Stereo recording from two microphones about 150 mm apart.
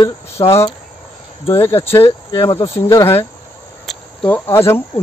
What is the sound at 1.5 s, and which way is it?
Speech, 15° left (ahead or behind).